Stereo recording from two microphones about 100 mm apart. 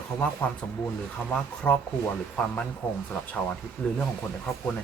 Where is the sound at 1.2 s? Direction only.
15° left (ahead or behind).